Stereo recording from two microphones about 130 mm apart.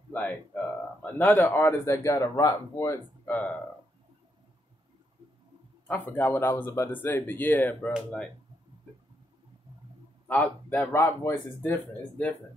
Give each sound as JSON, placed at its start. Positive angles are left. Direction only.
{"t": 1.0, "sound": "speech", "side_deg": 15}
{"t": 3.3, "sound": "speech", "side_deg": 10}
{"t": 5.9, "sound": "speech", "side_deg": 10}
{"t": 10.2, "sound": "speech", "side_deg": 10}